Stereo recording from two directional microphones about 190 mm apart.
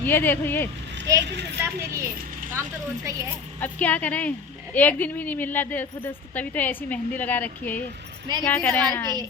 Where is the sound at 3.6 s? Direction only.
10° left (ahead or behind).